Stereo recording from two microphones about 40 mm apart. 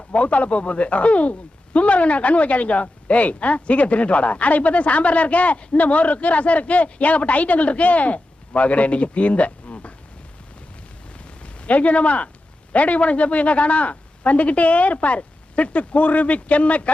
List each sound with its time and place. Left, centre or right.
0.1 s speech: left
11.4 s speech: left